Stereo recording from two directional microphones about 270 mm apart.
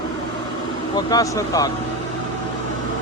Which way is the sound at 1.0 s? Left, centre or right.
Centre.